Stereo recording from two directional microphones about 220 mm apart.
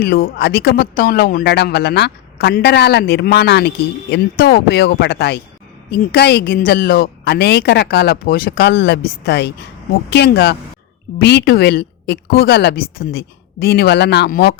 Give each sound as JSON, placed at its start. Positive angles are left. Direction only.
{"t": 0.0, "sound": "speech", "side_deg": 45}